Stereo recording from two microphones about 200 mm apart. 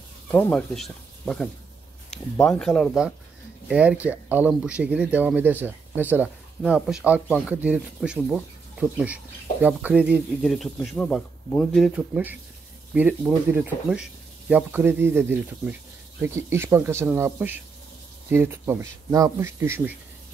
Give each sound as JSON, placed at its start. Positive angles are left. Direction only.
{"t": 0.3, "sound": "speech", "side_deg": 5}